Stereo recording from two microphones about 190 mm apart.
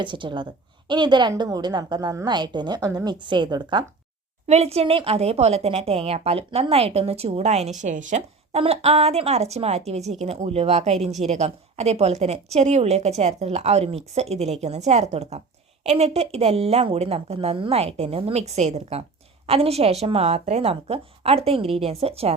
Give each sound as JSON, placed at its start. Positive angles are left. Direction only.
{"t": 0.0, "sound": "a woman's voice", "side_deg": -25}